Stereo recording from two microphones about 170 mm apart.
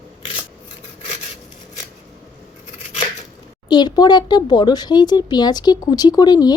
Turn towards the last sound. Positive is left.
turn(degrees=25)  # may be behind; listen again after turning